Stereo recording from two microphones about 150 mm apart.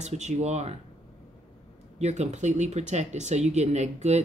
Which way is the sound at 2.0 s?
50° right (ahead or behind).